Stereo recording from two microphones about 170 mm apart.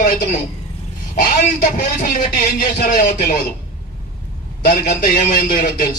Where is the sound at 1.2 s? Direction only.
55° left (ahead or behind).